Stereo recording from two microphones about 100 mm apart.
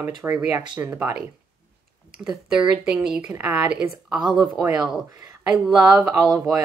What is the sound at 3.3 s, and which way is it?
Speech, 15° right (ahead or behind).